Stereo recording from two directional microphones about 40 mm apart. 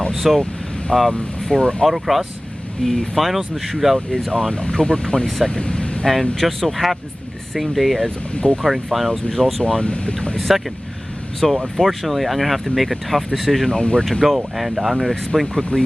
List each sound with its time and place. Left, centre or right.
0.1 s speech: centre
0.9 s speech: centre
2.8 s speech: centre
3.2 s speech: centre
4.3 s speech: centre
6.3 s speech: centre
9.8 s speech: left
10.5 s speech: centre
13.7 s speech: centre
14.0 s speech: centre
15.4 s speech: centre